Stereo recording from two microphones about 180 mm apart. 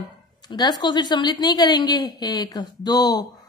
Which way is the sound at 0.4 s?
25° left (ahead or behind).